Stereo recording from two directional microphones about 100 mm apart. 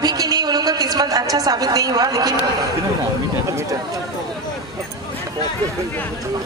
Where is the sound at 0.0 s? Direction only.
40° right (ahead or behind).